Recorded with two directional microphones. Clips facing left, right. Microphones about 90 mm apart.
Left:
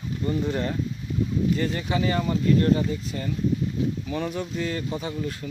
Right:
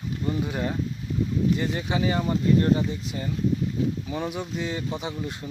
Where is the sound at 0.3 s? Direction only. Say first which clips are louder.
Left 2 dB; 10° right (ahead or behind).